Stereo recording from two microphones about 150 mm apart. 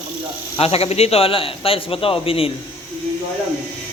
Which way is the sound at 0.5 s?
40° left (ahead or behind).